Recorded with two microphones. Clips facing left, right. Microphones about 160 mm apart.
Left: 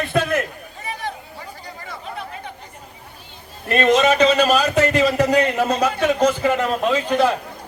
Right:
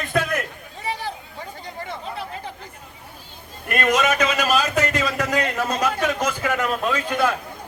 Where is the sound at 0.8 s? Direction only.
30° right (ahead or behind).